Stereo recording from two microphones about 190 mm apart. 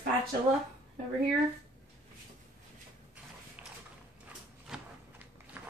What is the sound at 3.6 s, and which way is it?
Mechanisms, 5° right (ahead or behind).